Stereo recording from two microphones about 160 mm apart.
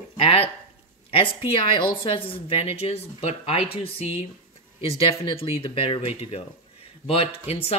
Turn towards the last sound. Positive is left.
turn(degrees=40)  # may be behind; listen again after turning